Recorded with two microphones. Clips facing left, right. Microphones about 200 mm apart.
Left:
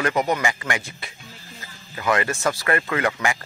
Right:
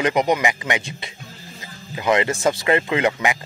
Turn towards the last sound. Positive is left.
turn(degrees=-20)  # may be behind; listen again after turning